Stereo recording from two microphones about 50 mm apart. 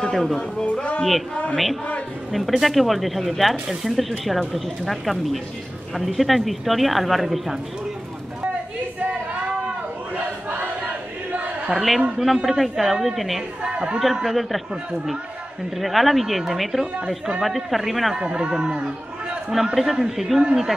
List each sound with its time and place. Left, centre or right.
0.1 s a man's voice: centre
1.3 s a woman's voice: left
2.3 s speech: centre
11.7 s speech: centre
13.6 s a woman's voice: right
14.2 s speech: centre
15.8 s speech: centre
18.1 s speech: centre